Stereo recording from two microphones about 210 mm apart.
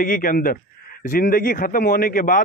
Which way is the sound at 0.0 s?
40° left (ahead or behind).